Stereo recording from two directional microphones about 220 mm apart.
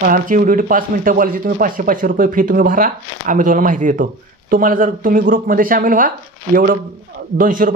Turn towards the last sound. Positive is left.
turn(degrees=-40)  # may be behind; listen again after turning